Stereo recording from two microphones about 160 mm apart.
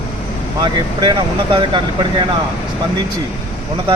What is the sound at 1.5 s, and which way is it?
Speech, 30° right (ahead or behind).